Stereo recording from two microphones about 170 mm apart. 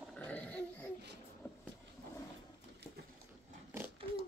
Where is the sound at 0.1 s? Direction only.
10° left (ahead or behind).